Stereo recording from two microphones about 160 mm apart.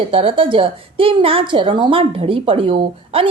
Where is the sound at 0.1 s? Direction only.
35° right (ahead or behind).